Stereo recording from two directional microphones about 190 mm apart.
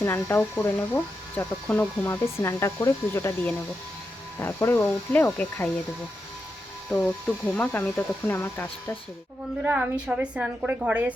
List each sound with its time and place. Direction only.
0.0 s speech: 15° left (ahead or behind)
6.9 s speech: 15° left (ahead or behind)
9.6 s a woman's voice: 5° right (ahead or behind)